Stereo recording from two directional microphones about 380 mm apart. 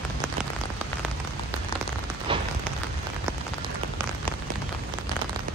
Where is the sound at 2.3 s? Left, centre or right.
Centre.